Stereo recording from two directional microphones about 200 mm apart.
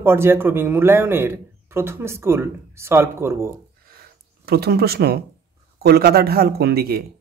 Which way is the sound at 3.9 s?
50° right (ahead or behind).